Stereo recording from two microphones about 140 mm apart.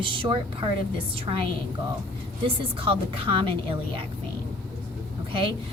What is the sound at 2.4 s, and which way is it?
A woman's voice, 40° right (ahead or behind).